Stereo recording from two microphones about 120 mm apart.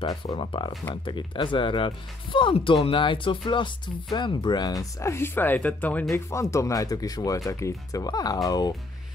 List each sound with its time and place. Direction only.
0.0 s speech: 35° left (ahead or behind); by 6.0 s 15° left (ahead or behind)
6.1 s speech: 25° left (ahead or behind)